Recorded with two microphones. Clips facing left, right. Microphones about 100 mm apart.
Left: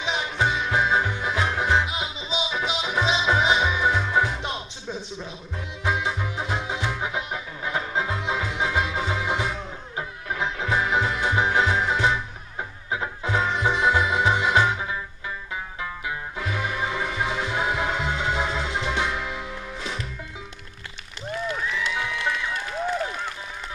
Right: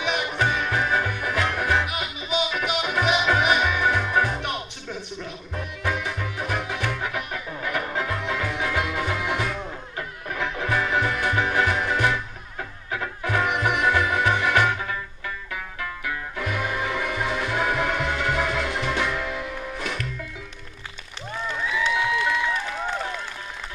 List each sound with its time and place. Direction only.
0.0 s music: 20° left (ahead or behind)